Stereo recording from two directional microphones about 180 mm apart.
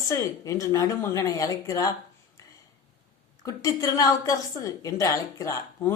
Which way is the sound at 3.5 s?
20° left (ahead or behind).